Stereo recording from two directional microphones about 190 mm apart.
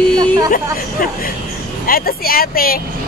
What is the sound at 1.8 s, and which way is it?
Speech, 50° left (ahead or behind).